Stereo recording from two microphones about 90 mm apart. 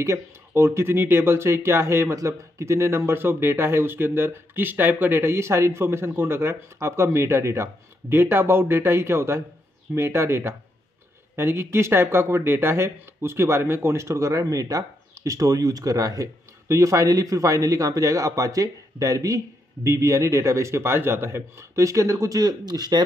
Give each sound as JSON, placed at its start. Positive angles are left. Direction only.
{"t": 0.5, "sound": "speech", "side_deg": -25}